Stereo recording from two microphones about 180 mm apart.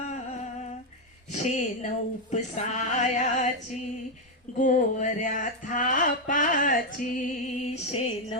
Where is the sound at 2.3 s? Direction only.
40° left (ahead or behind).